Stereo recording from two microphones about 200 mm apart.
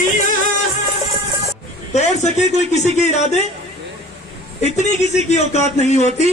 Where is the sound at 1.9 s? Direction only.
35° left (ahead or behind).